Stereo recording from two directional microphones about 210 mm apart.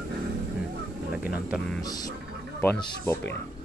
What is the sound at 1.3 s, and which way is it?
Speech, 5° right (ahead or behind).